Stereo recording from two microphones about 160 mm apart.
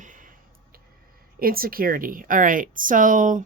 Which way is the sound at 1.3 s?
65° right (ahead or behind).